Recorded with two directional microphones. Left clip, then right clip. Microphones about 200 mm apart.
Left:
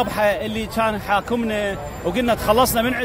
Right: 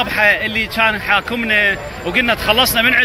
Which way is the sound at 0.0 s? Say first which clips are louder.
Right 5 dB; 15° left (ahead or behind).